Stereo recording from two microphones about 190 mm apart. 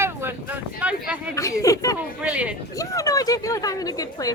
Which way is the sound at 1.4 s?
15° left (ahead or behind).